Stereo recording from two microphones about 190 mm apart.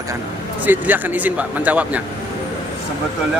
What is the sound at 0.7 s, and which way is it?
Speech, 10° right (ahead or behind).